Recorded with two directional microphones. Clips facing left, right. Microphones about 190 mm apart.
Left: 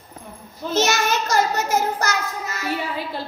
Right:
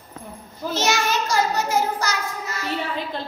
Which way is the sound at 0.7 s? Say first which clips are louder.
Left 2 dB; 45° left (ahead or behind).